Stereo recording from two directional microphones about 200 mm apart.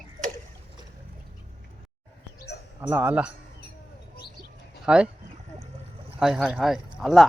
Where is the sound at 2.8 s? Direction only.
10° right (ahead or behind).